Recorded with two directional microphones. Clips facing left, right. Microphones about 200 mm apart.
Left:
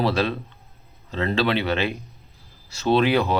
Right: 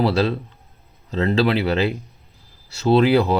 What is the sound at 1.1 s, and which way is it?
Speech, 30° right (ahead or behind).